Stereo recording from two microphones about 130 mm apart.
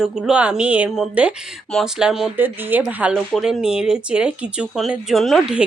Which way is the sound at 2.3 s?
15° right (ahead or behind).